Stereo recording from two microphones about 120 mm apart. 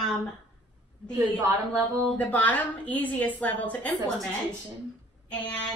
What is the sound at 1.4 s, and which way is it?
Speech, 25° right (ahead or behind).